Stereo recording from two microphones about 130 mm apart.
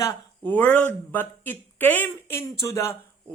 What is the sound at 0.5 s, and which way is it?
Speech, 10° left (ahead or behind).